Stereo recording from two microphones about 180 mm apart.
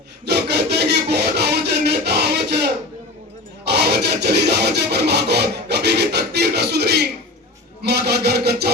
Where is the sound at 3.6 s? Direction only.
65° right (ahead or behind).